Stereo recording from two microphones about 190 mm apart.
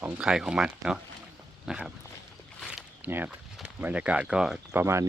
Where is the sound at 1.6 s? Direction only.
5° right (ahead or behind).